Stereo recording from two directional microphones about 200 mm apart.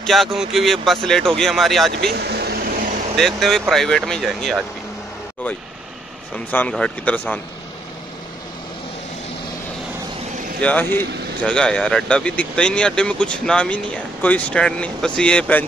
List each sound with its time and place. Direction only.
0.0 s speech: centre (ahead or behind)
2.0 s speech: 55° right (ahead or behind)
3.2 s speech: centre (ahead or behind)
6.3 s a man's voice: 5° left (ahead or behind)
10.6 s speech: 10° left (ahead or behind)